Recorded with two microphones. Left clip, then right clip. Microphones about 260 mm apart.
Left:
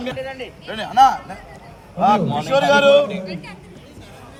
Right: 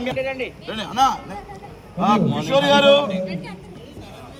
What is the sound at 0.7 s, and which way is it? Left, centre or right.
A man's voice, centre.